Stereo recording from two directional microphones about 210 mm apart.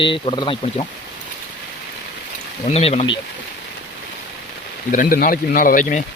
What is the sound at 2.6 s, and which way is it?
Speech, 30° left (ahead or behind).